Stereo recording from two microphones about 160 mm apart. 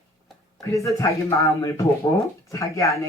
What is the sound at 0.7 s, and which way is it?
Speech, 20° left (ahead or behind).